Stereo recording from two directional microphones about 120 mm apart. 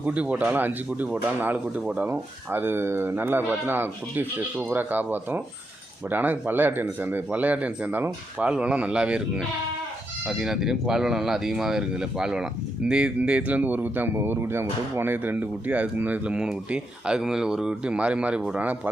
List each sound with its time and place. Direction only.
0.0 s speech: 10° right (ahead or behind)